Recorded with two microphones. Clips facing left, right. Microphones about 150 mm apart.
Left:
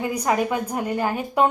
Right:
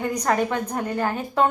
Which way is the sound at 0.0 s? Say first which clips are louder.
Even; 5° left (ahead or behind).